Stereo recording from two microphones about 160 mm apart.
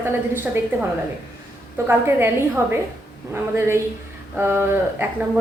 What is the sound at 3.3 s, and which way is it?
A woman's voice, 15° right (ahead or behind).